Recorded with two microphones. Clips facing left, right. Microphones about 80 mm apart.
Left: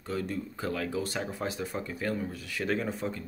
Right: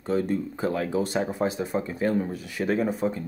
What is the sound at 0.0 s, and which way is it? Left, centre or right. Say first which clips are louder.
Speech: right 8 dB; right.